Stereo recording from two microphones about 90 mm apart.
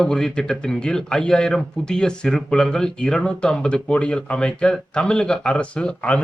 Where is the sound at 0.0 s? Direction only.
10° left (ahead or behind).